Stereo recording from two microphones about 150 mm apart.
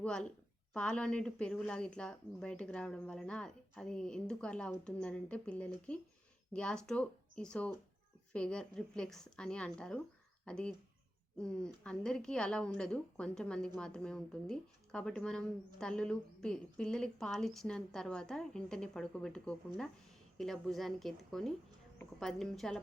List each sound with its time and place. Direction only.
0.0 s a woman's voice: 5° left (ahead or behind)